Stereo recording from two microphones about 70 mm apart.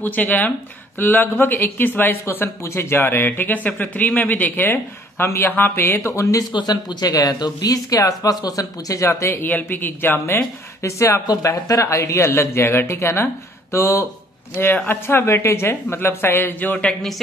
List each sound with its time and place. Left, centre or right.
0.0 s speech: left
6.5 s speech: left
9.4 s a woman's voice: left
14.5 s a woman's voice: left